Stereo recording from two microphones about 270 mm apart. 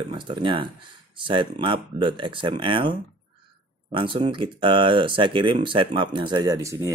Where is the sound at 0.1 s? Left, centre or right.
Centre.